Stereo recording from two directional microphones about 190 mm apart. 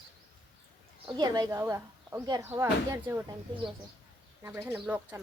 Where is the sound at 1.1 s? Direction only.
20° right (ahead or behind).